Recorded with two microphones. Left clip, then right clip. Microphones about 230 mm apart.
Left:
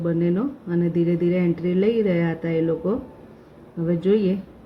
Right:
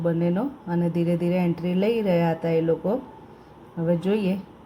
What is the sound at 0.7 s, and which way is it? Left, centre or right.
Speech, centre.